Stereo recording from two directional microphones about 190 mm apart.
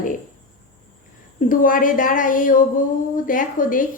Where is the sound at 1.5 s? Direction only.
45° left (ahead or behind).